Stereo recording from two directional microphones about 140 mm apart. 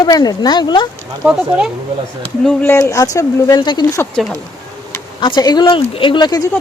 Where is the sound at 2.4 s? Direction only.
5° left (ahead or behind).